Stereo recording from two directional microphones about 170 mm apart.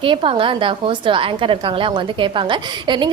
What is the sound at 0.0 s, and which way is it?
A woman's voice, 30° right (ahead or behind).